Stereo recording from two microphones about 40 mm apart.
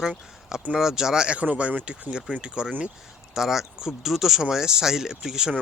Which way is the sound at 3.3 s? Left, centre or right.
Centre.